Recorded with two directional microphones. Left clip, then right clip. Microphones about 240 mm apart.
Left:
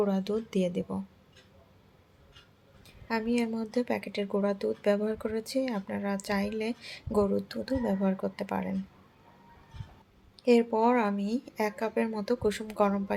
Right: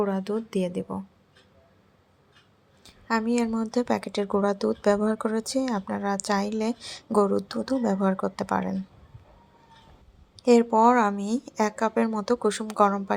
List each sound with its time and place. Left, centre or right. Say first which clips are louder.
0.0 s speech: right 2 dB; centre
2.8 s speech: right 5 dB; centre
10.4 s speech: right 6 dB; centre